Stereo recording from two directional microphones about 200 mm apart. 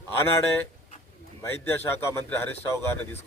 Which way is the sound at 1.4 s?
10° left (ahead or behind).